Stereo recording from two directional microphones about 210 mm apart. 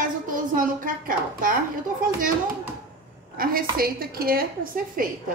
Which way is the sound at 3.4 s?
45° right (ahead or behind).